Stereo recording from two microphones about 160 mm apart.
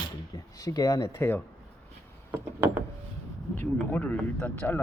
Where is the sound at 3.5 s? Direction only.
10° left (ahead or behind).